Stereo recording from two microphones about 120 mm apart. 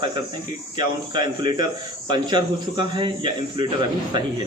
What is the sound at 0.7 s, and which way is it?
A man's voice, 40° right (ahead or behind).